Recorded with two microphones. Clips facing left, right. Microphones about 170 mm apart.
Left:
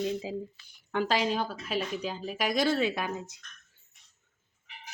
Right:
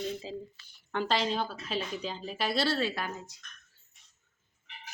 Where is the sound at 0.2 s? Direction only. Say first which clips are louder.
Left 4 dB; 10° left (ahead or behind).